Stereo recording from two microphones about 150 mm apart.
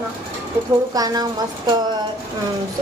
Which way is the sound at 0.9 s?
25° right (ahead or behind).